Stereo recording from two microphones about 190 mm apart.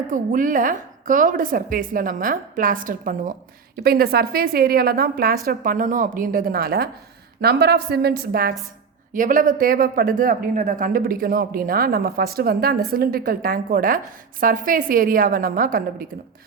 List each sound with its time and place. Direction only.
0.1 s a woman's voice: 45° right (ahead or behind)